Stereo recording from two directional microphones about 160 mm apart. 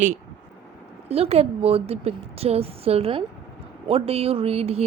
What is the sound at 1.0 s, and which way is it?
A woman's voice, 40° right (ahead or behind).